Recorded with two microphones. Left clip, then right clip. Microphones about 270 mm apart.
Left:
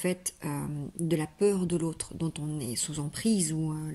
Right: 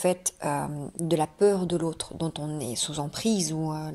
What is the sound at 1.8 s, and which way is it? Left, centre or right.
Speech, right.